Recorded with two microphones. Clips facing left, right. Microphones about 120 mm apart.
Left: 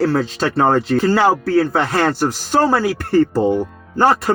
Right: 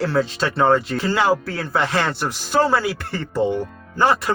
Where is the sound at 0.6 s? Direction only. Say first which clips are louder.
Left 3 dB; 40° left (ahead or behind).